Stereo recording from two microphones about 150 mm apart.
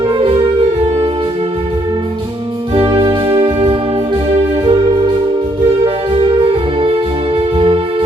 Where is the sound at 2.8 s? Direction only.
35° right (ahead or behind).